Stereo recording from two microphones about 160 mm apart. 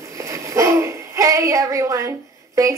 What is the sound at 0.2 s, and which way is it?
A child's voice, 20° right (ahead or behind).